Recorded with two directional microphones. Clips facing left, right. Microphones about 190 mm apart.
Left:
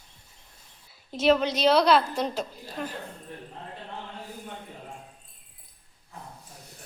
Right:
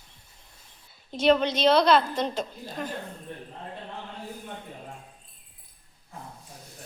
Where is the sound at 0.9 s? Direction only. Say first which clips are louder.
Right 1 dB; 5° left (ahead or behind).